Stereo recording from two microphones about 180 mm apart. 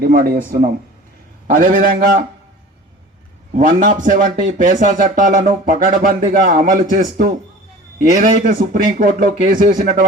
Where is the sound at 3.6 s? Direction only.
50° right (ahead or behind).